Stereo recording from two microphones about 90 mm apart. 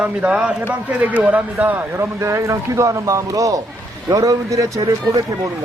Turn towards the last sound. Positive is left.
turn(degrees=-50)  # may be behind; listen again after turning